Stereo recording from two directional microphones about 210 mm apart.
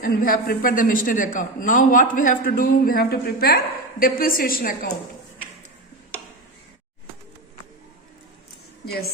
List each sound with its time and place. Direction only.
0.0 s a man's voice: 40° left (ahead or behind)